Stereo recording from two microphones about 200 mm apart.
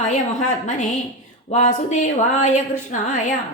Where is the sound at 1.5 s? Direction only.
35° left (ahead or behind).